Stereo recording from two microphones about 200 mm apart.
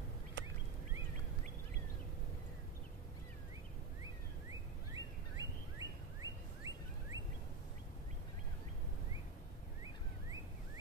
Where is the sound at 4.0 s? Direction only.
15° right (ahead or behind).